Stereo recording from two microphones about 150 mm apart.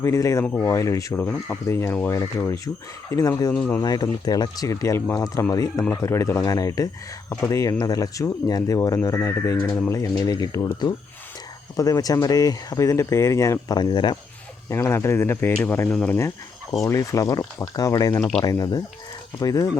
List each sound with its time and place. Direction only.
0.0 s speech: 20° left (ahead or behind)
3.5 s speech: 5° left (ahead or behind)
3.8 s speech: 25° left (ahead or behind)
14.7 s speech: 20° left (ahead or behind)
16.8 s speech: 20° left (ahead or behind)